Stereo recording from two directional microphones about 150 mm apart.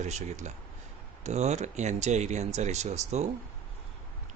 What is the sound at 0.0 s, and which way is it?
Speech, 50° right (ahead or behind).